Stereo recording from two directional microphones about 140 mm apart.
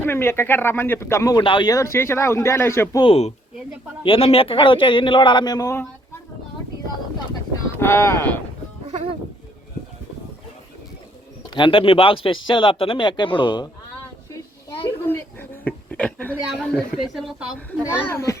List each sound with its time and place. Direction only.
0.0 s speech: 15° left (ahead or behind)
3.0 s speech: 45° left (ahead or behind); by 5.8 s 25° left (ahead or behind)
7.8 s speech: 20° left (ahead or behind)
8.9 s a sound: 45° right (ahead or behind)
11.5 s speech: 35° left (ahead or behind)
15.0 s a sound: 15° left (ahead or behind)
16.5 s speech: centre (ahead or behind)
17.7 s speech: 20° left (ahead or behind)